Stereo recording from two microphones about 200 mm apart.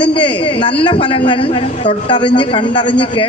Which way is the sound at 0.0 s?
25° left (ahead or behind).